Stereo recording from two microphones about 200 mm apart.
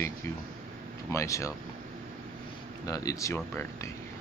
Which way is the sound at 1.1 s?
15° left (ahead or behind).